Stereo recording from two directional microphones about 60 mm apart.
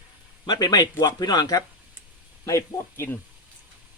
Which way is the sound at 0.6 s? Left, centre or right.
Left.